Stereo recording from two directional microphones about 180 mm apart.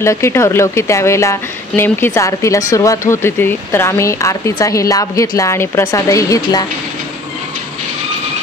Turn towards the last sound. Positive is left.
turn(degrees=20)  # may be behind; listen again after turning